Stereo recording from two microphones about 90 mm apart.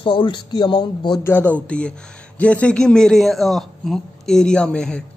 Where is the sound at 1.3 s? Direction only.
20° left (ahead or behind).